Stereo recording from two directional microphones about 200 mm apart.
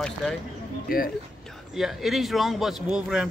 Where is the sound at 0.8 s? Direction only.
45° left (ahead or behind).